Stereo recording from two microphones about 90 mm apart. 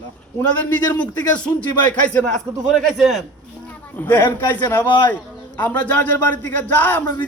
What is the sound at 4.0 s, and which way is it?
Speech, 20° left (ahead or behind).